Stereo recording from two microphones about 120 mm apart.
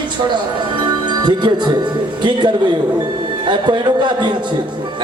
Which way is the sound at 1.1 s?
40° right (ahead or behind).